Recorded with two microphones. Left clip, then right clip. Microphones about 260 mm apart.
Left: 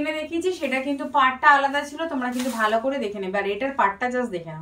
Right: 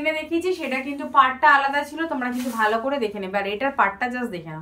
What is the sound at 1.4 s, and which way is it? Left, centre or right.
Speech, centre.